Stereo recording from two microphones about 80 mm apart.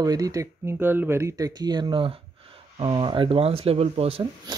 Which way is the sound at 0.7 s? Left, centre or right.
Right.